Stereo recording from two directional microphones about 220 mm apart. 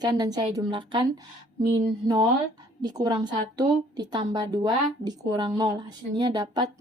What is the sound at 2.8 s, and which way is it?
A woman's voice, 15° right (ahead or behind).